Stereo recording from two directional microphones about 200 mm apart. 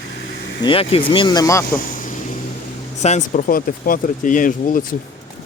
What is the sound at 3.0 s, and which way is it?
Speech, 35° left (ahead or behind).